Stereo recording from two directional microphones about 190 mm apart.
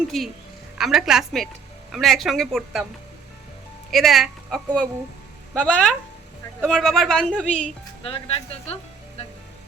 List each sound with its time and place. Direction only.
0.1 s a woman's voice: centre (ahead or behind)
3.9 s a woman's voice: centre (ahead or behind)
8.0 s speech: 30° left (ahead or behind)